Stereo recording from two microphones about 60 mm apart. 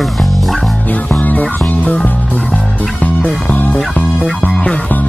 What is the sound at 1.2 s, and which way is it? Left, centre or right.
Music, left.